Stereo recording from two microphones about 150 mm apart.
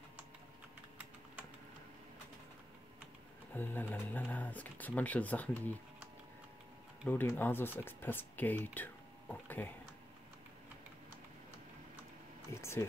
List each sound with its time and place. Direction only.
3.5 s speech: 15° left (ahead or behind)
7.1 s speech: 15° left (ahead or behind)
12.4 s a sound: 15° left (ahead or behind)